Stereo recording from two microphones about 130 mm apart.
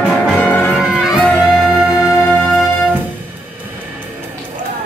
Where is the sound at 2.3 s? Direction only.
10° left (ahead or behind).